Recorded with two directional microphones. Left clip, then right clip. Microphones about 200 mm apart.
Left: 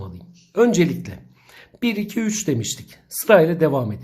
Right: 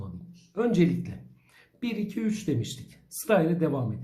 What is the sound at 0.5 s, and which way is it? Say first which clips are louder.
Speech: left 9 dB; 40° left (ahead or behind).